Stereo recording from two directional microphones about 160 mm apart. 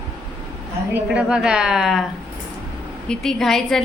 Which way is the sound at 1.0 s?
5° right (ahead or behind).